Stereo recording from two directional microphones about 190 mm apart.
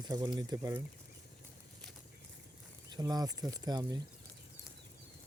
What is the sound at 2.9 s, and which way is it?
Speech, 20° right (ahead or behind).